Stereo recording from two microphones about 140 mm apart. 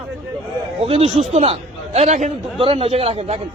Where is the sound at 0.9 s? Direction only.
45° right (ahead or behind).